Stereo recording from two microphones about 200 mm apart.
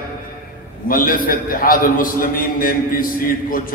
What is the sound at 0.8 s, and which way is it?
A man's voice, 45° left (ahead or behind).